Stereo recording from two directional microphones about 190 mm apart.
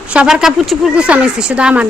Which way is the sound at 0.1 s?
5° right (ahead or behind).